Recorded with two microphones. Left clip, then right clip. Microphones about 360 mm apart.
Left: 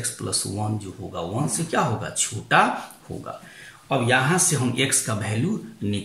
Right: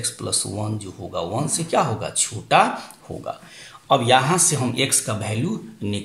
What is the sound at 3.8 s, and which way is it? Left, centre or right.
Speech, centre.